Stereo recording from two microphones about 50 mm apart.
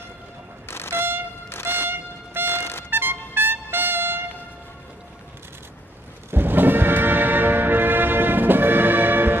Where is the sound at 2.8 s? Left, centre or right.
Right.